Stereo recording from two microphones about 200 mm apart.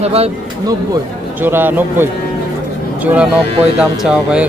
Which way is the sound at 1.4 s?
10° right (ahead or behind).